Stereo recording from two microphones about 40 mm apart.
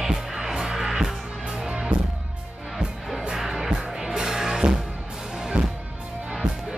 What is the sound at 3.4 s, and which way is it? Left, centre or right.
Music, centre.